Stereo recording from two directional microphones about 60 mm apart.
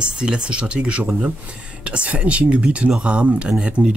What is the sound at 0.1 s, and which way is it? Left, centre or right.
Speech, centre.